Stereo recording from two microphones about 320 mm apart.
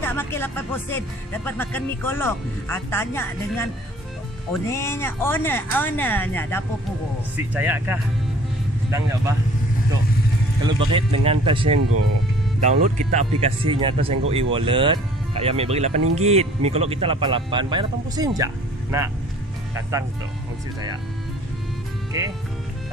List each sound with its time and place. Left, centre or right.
0.0 s speech: centre
7.3 s speech: centre
10.6 s speech: centre
11.8 s speech: right
12.5 s speech: right